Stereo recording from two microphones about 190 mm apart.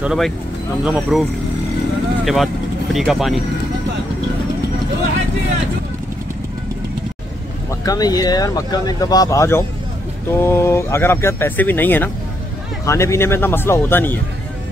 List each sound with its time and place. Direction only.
0.0 s speech: 5° right (ahead or behind)
2.2 s speech: centre (ahead or behind)
7.8 s speech: 20° left (ahead or behind)